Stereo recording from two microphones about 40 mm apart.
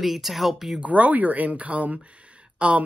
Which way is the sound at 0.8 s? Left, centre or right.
Right.